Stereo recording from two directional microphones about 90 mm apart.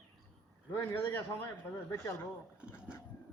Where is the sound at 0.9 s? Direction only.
25° left (ahead or behind).